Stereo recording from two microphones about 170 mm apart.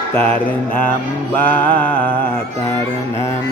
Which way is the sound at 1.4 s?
10° left (ahead or behind).